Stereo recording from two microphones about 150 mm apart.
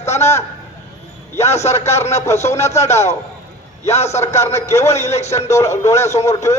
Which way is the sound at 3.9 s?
45° left (ahead or behind).